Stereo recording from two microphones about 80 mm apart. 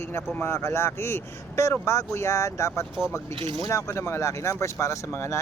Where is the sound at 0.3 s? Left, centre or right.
Left.